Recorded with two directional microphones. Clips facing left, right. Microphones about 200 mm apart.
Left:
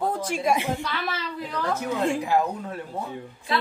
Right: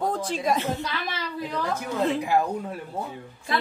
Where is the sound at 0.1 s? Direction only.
10° left (ahead or behind).